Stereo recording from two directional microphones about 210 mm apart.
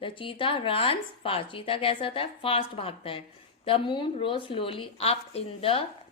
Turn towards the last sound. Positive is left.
turn(degrees=25)  # may be behind; listen again after turning